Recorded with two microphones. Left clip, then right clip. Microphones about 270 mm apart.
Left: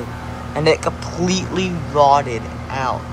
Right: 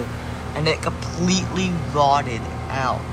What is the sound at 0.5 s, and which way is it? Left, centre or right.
Speech, centre.